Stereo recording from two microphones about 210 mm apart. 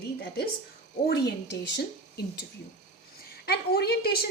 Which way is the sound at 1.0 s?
55° left (ahead or behind).